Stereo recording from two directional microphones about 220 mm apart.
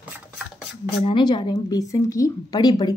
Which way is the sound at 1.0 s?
20° left (ahead or behind).